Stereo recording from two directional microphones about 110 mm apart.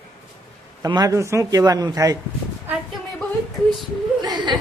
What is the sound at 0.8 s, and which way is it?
A man's voice, 35° right (ahead or behind).